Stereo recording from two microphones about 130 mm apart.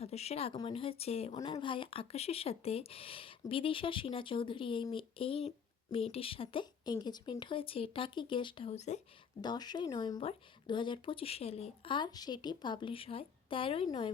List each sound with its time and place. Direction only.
0.0 s speech: 55° left (ahead or behind)
1.5 s speech: 40° left (ahead or behind); by 9.0 s 60° left (ahead or behind)
9.4 s speech: 35° left (ahead or behind)